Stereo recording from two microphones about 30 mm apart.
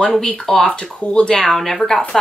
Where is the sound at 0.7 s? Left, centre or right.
Left.